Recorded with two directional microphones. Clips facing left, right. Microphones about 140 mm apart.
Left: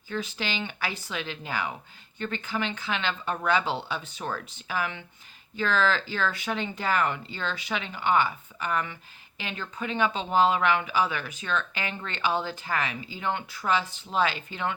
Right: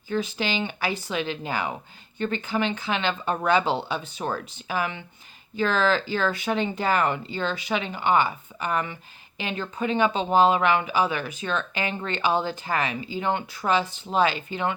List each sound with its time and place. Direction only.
0.1 s speech: 15° right (ahead or behind)